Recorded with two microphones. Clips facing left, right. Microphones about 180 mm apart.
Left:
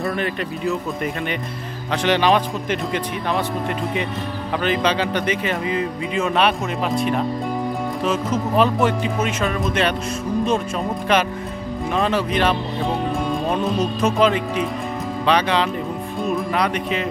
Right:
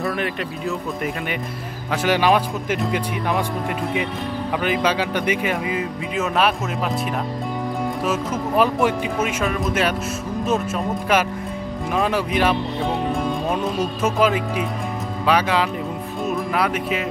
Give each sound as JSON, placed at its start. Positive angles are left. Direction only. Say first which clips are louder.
{"t": 0.0, "sound": "speech", "louder": "left 1 dB", "side_deg": 0}
{"t": 11.9, "sound": "speech", "louder": "left 1 dB", "side_deg": -10}